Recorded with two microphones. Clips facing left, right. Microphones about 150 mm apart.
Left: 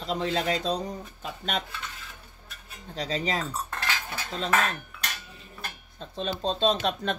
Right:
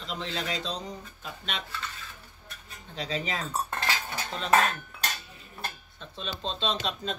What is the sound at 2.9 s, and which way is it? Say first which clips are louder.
Speech: left 3 dB; 40° left (ahead or behind).